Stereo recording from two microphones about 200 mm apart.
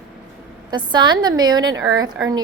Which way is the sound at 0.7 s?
20° right (ahead or behind).